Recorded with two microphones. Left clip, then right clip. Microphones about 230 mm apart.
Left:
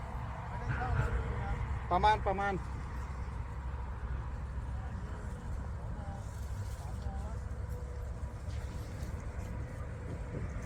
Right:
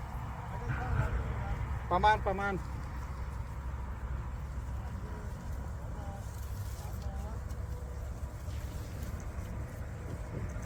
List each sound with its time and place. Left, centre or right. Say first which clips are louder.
0.3 s vehicle: left 1 dB; left
1.9 s speech: right 1 dB; centre